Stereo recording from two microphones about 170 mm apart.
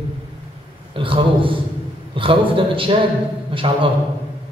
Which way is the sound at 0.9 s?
30° right (ahead or behind).